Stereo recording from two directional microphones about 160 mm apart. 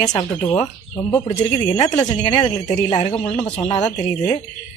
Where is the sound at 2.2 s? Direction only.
35° left (ahead or behind).